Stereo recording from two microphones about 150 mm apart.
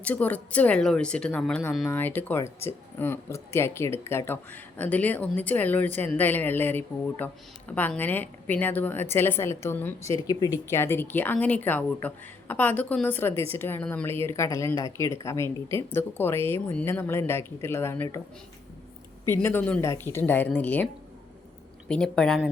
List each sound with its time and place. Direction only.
0.0 s speech: 10° left (ahead or behind)
19.3 s speech: 15° left (ahead or behind)
21.8 s speech: 5° left (ahead or behind)